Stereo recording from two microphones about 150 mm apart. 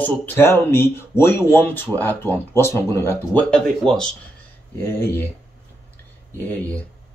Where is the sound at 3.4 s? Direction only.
5° left (ahead or behind).